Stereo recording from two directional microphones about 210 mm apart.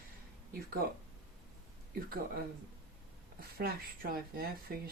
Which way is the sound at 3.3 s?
45° right (ahead or behind).